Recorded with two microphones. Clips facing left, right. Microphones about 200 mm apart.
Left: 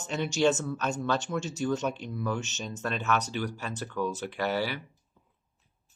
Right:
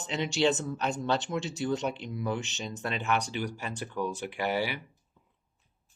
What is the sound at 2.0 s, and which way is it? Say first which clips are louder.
Speech: even; 15° right (ahead or behind).